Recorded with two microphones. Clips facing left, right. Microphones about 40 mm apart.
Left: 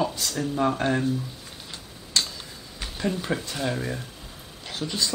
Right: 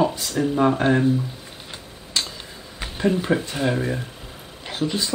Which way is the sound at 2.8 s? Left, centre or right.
Right.